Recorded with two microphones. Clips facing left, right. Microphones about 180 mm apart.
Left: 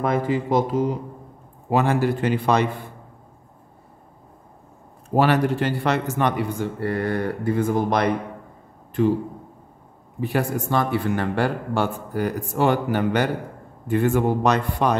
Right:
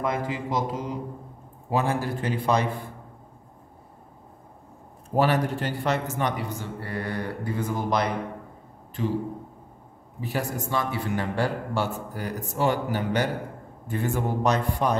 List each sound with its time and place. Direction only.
0.0 s a man's voice: 55° left (ahead or behind)
1.7 s a man's voice: 70° left (ahead or behind)
5.1 s a man's voice: 75° left (ahead or behind); by 8.1 s 55° left (ahead or behind)
10.2 s a man's voice: 55° left (ahead or behind)